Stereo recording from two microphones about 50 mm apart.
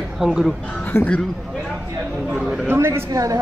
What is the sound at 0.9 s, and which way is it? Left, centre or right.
Speech, left.